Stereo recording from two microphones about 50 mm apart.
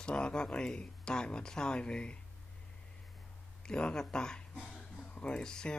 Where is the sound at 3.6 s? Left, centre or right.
Centre.